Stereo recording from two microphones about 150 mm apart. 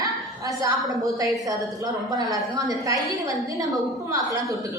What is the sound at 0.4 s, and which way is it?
A woman's voice, 20° right (ahead or behind).